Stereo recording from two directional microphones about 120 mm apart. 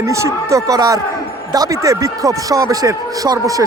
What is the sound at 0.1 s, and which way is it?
Speech, 25° right (ahead or behind).